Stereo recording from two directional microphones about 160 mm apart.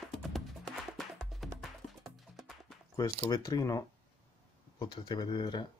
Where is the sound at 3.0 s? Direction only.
25° left (ahead or behind).